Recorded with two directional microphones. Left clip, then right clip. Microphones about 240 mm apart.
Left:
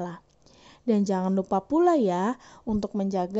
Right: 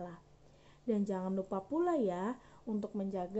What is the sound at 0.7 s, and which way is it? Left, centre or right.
A woman's voice, left.